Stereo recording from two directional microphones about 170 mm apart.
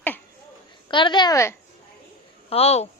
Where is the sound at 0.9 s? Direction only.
25° left (ahead or behind).